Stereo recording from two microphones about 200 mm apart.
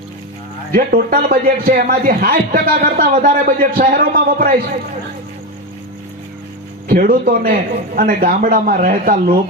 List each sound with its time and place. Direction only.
0.7 s a man's voice: 45° right (ahead or behind)
6.8 s a man's voice: 45° right (ahead or behind)